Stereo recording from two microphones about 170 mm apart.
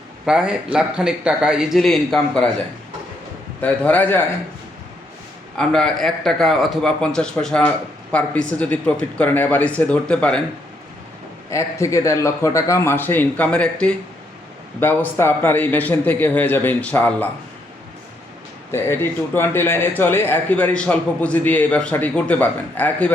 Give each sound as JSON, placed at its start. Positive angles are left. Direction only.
{"t": 0.3, "sound": "speech", "side_deg": -5}
{"t": 3.6, "sound": "a man's voice", "side_deg": 10}
{"t": 5.5, "sound": "a man's voice", "side_deg": 5}
{"t": 11.5, "sound": "a man's voice", "side_deg": 20}
{"t": 18.7, "sound": "a man's voice", "side_deg": 15}